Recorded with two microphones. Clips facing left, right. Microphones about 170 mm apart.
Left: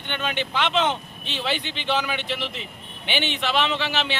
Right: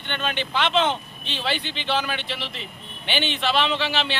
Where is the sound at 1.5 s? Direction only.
15° left (ahead or behind).